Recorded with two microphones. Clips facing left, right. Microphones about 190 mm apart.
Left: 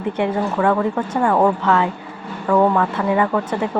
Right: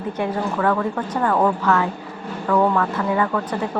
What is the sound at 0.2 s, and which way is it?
A woman's voice, 20° left (ahead or behind).